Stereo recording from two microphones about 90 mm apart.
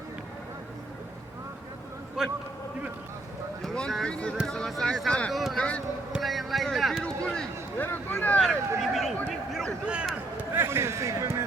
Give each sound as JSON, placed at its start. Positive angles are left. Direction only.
{"t": 2.2, "sound": "speech", "side_deg": -5}
{"t": 3.6, "sound": "speech", "side_deg": 5}
{"t": 5.3, "sound": "speech", "side_deg": 0}
{"t": 5.5, "sound": "speech", "side_deg": 10}
{"t": 6.1, "sound": "a sound", "side_deg": 0}
{"t": 7.8, "sound": "speech", "side_deg": 20}
{"t": 8.4, "sound": "a sound", "side_deg": 0}
{"t": 10.5, "sound": "a man's voice", "side_deg": -25}